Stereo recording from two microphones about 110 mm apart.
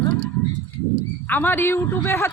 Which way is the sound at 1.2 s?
15° left (ahead or behind).